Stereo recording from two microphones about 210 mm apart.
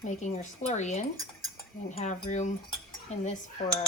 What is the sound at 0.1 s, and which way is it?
Speech, 35° left (ahead or behind).